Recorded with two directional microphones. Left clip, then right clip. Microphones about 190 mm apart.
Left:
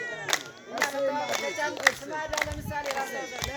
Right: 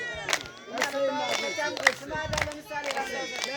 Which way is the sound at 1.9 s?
20° right (ahead or behind).